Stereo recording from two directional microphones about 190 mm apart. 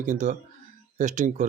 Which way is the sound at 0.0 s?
40° right (ahead or behind).